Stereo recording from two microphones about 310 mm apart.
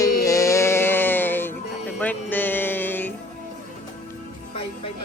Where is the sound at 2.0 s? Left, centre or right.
Centre.